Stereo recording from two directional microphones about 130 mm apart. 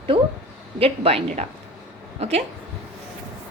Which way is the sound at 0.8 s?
50° right (ahead or behind).